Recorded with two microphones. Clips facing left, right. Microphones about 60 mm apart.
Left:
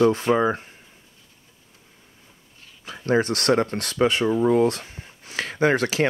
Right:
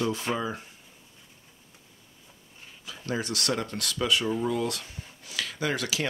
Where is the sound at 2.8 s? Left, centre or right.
Left.